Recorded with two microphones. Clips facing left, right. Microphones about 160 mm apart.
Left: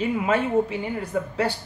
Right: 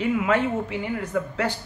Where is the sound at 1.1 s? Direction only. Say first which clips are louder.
Even; 25° left (ahead or behind).